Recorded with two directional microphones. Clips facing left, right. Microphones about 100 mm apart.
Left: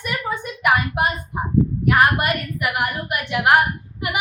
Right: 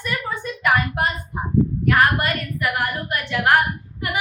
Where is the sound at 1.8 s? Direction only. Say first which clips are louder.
Left 2 dB; 15° left (ahead or behind).